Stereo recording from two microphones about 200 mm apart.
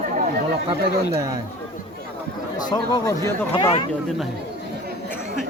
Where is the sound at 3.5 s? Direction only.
25° left (ahead or behind).